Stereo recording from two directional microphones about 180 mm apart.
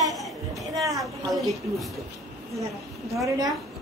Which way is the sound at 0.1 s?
Centre (ahead or behind).